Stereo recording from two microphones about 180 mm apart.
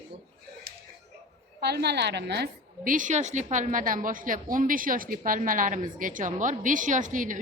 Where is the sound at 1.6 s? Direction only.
65° right (ahead or behind).